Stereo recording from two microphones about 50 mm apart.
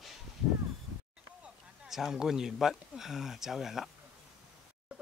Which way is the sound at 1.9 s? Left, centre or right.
Centre.